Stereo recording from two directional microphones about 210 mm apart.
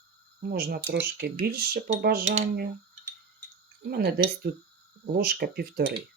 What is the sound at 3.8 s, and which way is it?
Speech, 50° right (ahead or behind).